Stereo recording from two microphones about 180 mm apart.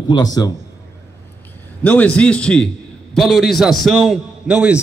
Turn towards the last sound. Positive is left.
turn(degrees=-5)  # may be behind; listen again after turning